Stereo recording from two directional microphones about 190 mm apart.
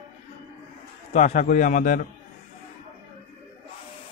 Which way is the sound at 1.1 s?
40° left (ahead or behind).